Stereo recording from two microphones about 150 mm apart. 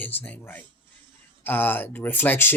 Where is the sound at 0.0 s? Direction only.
10° left (ahead or behind).